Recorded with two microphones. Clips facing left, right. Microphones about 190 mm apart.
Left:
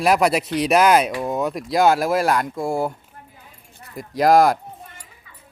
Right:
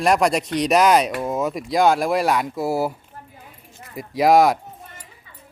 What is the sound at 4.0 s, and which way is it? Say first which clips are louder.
Speech: even; centre (ahead or behind).